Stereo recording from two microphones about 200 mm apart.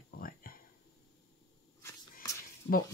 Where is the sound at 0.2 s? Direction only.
45° left (ahead or behind).